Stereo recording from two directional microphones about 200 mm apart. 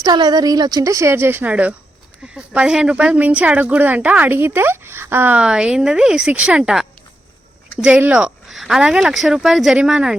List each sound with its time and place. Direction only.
0.0 s a woman's voice: 20° right (ahead or behind); by 10.2 s 5° right (ahead or behind)